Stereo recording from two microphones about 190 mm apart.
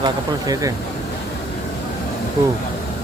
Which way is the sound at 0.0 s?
20° right (ahead or behind).